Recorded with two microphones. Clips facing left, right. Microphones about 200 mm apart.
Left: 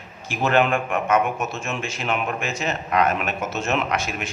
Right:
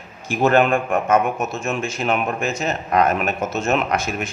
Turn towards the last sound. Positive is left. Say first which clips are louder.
# right 3 dB
turn(degrees=-45)  # may be behind; listen again after turning